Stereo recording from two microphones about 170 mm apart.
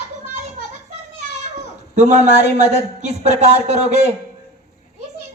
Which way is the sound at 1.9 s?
45° right (ahead or behind).